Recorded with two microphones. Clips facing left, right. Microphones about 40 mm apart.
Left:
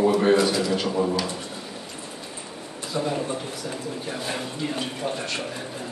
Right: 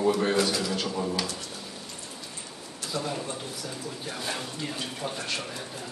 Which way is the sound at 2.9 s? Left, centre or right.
Centre.